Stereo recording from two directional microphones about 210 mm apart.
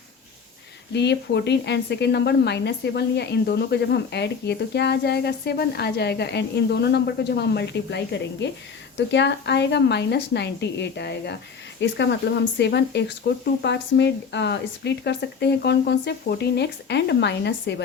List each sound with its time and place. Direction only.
0.9 s speech: 55° left (ahead or behind)